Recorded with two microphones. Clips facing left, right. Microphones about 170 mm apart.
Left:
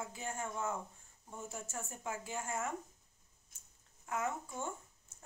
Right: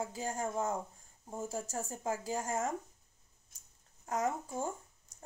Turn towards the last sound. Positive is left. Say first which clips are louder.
# right 4 dB
turn(degrees=-35)  # may be behind; listen again after turning